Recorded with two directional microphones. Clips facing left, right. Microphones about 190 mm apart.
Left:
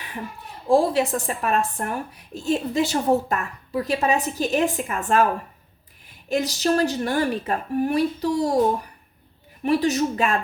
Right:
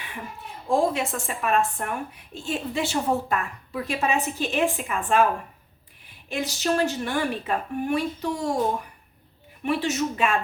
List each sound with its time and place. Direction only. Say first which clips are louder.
0.7 s a woman's voice: left 4 dB; 35° left (ahead or behind)
6.2 s a woman's voice: left 4 dB; 40° left (ahead or behind)
9.6 s a woman's voice: left 4 dB; 35° left (ahead or behind)